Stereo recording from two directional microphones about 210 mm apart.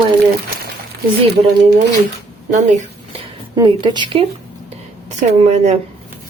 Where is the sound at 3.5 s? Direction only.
20° right (ahead or behind).